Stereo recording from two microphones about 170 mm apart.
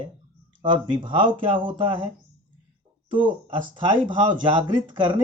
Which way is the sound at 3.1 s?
30° right (ahead or behind).